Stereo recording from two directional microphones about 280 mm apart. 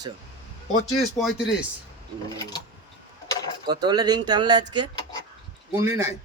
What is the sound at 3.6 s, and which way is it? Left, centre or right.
Speech, centre.